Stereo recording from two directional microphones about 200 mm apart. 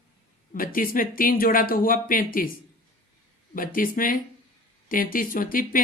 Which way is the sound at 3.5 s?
45° left (ahead or behind).